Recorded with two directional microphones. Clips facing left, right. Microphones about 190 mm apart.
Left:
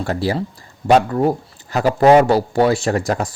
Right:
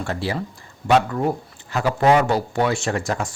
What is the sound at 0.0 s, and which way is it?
Speech, 40° left (ahead or behind).